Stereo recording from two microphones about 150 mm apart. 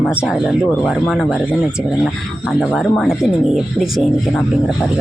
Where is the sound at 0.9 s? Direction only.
5° right (ahead or behind).